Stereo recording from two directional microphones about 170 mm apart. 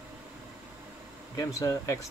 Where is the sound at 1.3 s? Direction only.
20° left (ahead or behind).